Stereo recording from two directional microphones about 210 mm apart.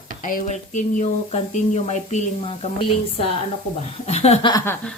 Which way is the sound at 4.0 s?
30° left (ahead or behind).